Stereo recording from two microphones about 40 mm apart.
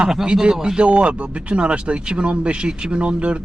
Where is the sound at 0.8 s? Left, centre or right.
Right.